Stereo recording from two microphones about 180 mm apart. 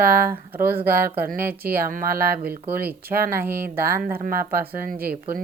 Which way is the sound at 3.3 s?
10° right (ahead or behind).